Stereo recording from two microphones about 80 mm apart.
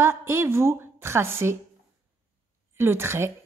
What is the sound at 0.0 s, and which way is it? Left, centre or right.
A woman's voice, right.